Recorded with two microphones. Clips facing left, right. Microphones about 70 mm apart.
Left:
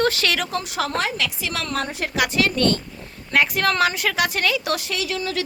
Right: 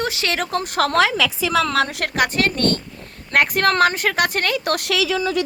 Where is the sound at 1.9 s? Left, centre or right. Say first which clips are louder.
Right 2 dB; right.